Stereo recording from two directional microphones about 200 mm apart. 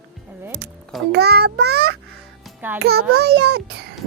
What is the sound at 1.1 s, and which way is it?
Speech, 55° right (ahead or behind).